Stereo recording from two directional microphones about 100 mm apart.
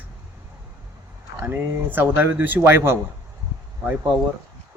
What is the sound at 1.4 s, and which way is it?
Speech, 20° right (ahead or behind).